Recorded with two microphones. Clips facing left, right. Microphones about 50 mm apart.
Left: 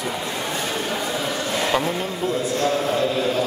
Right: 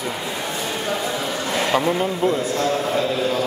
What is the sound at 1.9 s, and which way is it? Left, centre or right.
Speech, right.